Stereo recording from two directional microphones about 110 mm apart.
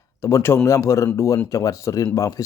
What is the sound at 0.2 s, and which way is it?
Speech, 25° left (ahead or behind).